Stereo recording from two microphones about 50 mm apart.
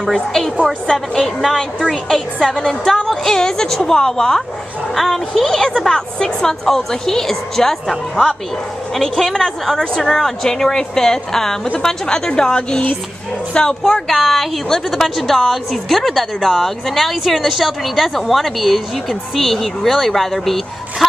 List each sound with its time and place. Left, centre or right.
0.0 s a woman's voice: centre